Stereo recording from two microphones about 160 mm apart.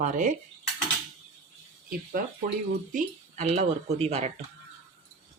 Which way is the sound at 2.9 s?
45° right (ahead or behind).